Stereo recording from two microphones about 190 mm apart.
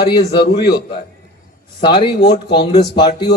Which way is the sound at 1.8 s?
25° left (ahead or behind).